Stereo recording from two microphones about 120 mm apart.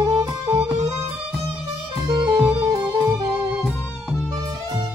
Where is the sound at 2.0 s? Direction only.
35° right (ahead or behind).